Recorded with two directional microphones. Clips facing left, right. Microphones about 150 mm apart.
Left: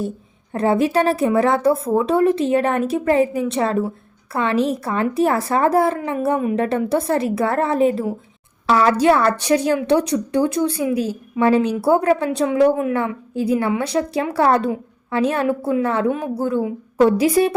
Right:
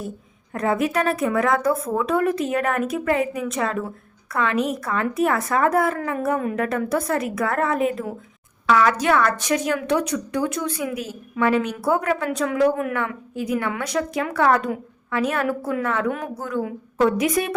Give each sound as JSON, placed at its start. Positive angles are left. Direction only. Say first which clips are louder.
{"t": 0.5, "sound": "a woman's voice", "louder": "left 5 dB", "side_deg": 30}